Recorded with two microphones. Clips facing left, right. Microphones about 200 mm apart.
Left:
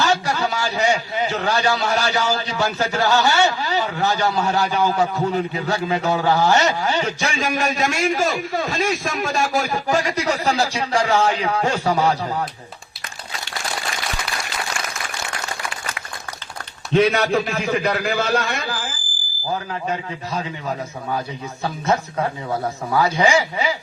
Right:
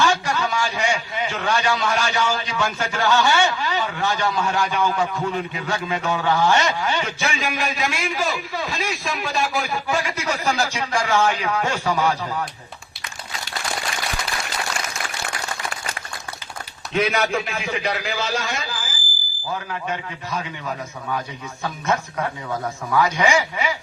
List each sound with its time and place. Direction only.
0.0 s a man's voice: 35° left (ahead or behind)
16.9 s a man's voice: 35° left (ahead or behind); by 18.9 s 60° left (ahead or behind)
19.9 s a man's voice: 30° left (ahead or behind)